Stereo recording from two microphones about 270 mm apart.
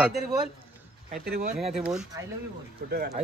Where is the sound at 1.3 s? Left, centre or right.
Right.